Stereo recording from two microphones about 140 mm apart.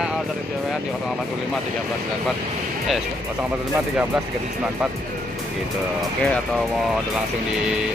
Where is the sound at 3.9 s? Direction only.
10° right (ahead or behind).